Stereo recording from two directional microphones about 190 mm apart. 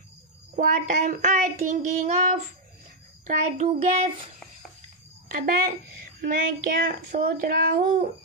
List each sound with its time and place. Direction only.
0.6 s a woman's voice: 45° right (ahead or behind)
3.3 s a child's voice: 40° right (ahead or behind)
5.3 s a woman's voice: 50° right (ahead or behind)